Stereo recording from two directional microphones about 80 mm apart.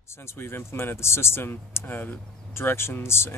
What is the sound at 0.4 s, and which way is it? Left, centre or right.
Speech, left.